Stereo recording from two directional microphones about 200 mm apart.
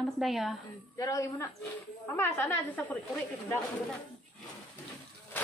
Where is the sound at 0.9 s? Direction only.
15° left (ahead or behind).